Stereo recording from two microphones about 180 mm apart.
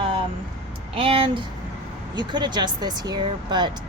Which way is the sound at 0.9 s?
30° right (ahead or behind).